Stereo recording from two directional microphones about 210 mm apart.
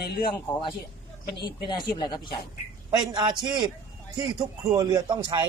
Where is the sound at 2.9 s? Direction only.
20° right (ahead or behind).